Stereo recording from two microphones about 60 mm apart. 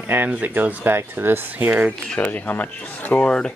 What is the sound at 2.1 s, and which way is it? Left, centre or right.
Speech, left.